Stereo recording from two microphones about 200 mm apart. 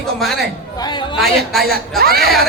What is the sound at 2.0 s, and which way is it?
Speech, 50° right (ahead or behind).